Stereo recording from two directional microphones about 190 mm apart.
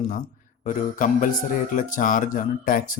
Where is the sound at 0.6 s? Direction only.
45° left (ahead or behind).